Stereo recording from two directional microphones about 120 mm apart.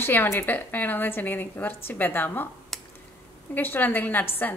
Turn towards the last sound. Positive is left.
turn(degrees=15)  # may be behind; listen again after turning